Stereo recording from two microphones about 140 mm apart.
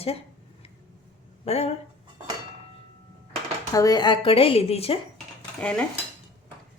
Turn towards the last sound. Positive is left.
turn(degrees=10)  # may be behind; listen again after turning